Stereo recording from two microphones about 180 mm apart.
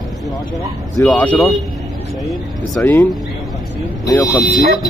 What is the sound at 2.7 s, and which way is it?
Speech, 10° left (ahead or behind).